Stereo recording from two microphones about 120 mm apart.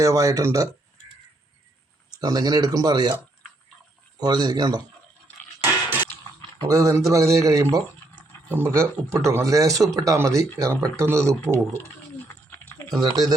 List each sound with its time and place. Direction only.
0.0 s speech: 25° right (ahead or behind)
2.2 s speech: 35° right (ahead or behind)
4.2 s speech: 35° right (ahead or behind)
5.5 s a sound: 15° right (ahead or behind)
6.7 s speech: 25° right (ahead or behind)
12.5 s a sound: 15° left (ahead or behind)
12.9 s speech: 35° right (ahead or behind)